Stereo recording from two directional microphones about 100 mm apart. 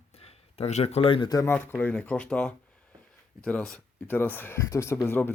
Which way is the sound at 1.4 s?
25° left (ahead or behind).